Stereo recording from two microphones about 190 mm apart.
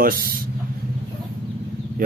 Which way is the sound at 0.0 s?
50° right (ahead or behind).